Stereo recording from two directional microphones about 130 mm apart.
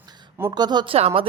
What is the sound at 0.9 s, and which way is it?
Speech, 50° right (ahead or behind).